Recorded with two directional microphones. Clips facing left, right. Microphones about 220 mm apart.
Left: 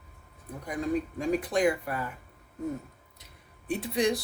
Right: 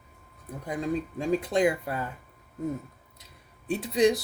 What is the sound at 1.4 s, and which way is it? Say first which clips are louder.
Speech: right 1 dB; 25° right (ahead or behind).